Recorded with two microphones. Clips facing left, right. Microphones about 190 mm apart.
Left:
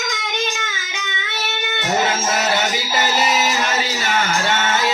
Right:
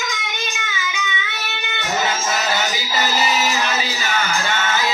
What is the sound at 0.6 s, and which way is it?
Child singing, 50° left (ahead or behind).